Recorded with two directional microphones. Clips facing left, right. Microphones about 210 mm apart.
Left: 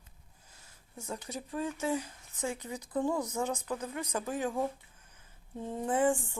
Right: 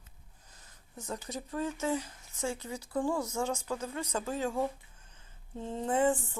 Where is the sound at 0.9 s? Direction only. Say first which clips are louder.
Right 1 dB; 10° left (ahead or behind).